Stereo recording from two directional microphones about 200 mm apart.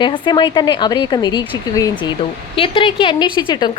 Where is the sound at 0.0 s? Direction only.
25° left (ahead or behind).